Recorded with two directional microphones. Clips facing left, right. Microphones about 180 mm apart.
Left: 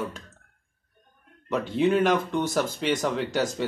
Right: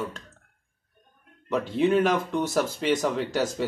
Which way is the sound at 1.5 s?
Centre (ahead or behind).